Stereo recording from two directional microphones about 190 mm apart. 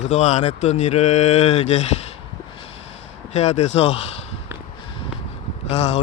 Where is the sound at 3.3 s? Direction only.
35° left (ahead or behind).